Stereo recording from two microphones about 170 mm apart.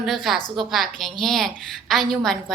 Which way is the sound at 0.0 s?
Centre (ahead or behind).